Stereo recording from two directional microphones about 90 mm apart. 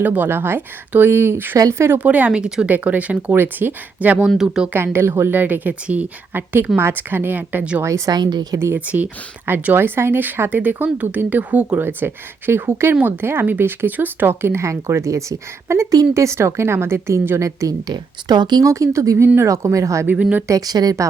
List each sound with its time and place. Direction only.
0.0 s speech: 20° right (ahead or behind)
1.5 s a woman's voice: 40° right (ahead or behind)
1.9 s speech: 15° right (ahead or behind)
7.8 s a woman's voice: 35° right (ahead or behind)
8.2 s a woman's voice: 50° right (ahead or behind)
8.5 s a woman's voice: 25° right (ahead or behind); by 18.6 s 55° right (ahead or behind)
18.6 s a woman's voice: 35° right (ahead or behind)
20.1 s speech: 20° right (ahead or behind)
20.5 s a woman's voice: 45° right (ahead or behind)